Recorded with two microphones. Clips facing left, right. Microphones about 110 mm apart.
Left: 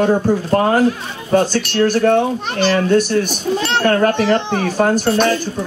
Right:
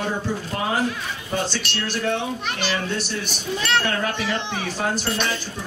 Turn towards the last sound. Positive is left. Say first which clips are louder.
# left 10 dB
turn(degrees=50)  # may be behind; listen again after turning